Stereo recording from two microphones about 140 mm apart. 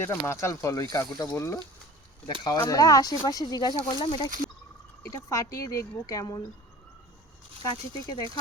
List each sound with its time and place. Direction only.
0.0 s speech: 20° left (ahead or behind)
2.4 s speech: 30° left (ahead or behind)
5.0 s speech: 25° left (ahead or behind)
7.6 s speech: 30° left (ahead or behind)